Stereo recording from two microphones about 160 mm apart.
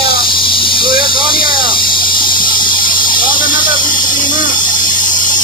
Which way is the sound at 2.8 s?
60° left (ahead or behind).